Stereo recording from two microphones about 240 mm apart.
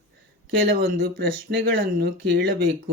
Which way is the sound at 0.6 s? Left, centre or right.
Right.